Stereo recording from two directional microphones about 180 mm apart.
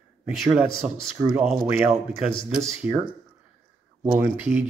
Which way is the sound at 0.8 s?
5° right (ahead or behind).